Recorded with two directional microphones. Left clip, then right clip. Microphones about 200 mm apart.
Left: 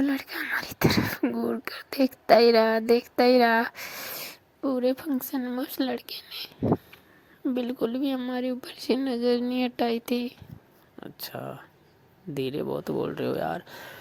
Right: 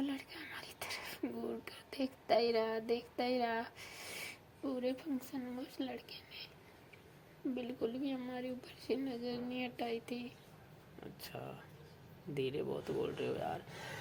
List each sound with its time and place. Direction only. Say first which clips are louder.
0.0 s speech: left 14 dB; 25° left (ahead or behind)
4.6 s speech: left 13 dB; 35° left (ahead or behind)